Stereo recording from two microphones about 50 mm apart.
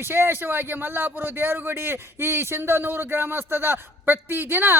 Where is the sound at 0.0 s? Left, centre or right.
Right.